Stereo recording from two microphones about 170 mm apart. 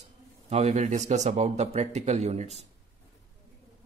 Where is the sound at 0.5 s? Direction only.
40° right (ahead or behind).